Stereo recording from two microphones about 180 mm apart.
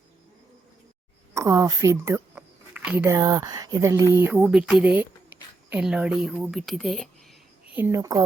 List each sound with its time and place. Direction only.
1.3 s a sound: 15° right (ahead or behind)
3.2 s speech: 20° right (ahead or behind); by 7.8 s centre (ahead or behind)
7.8 s a woman's voice: 15° right (ahead or behind)